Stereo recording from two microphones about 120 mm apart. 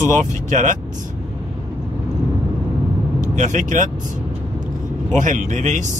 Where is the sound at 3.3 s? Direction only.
90° right.